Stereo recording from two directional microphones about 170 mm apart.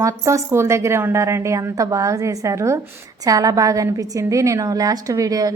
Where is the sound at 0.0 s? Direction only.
20° right (ahead or behind).